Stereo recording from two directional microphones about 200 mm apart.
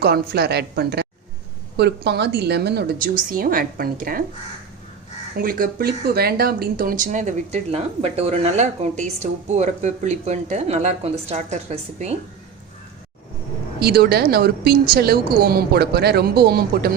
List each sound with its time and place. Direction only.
0.0 s a woman's voice: 55° right (ahead or behind)
5.4 s speech: 45° right (ahead or behind)
13.7 s a woman's voice: 55° right (ahead or behind)